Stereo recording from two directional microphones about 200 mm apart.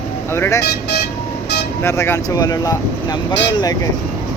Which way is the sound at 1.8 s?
15° left (ahead or behind).